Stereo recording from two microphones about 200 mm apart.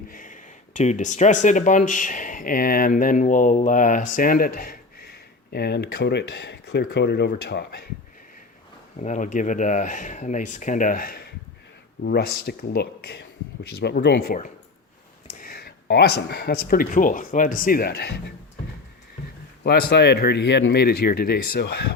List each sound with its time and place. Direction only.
0.1 s speech: 40° left (ahead or behind)
9.0 s speech: 35° left (ahead or behind); by 18.2 s 55° left (ahead or behind)
19.9 s speech: 55° left (ahead or behind)